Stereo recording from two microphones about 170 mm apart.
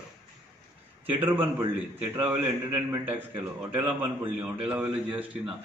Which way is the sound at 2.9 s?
10° right (ahead or behind).